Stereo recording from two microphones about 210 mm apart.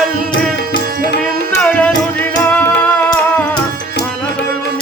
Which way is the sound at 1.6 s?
5° left (ahead or behind).